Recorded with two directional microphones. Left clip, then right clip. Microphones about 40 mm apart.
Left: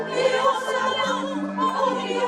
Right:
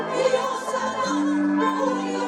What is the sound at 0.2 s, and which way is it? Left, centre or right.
Music, left.